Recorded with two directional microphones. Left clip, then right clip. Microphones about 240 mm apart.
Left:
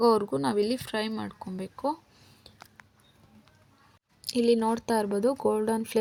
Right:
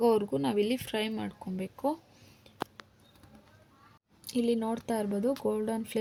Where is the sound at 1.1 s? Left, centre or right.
Left.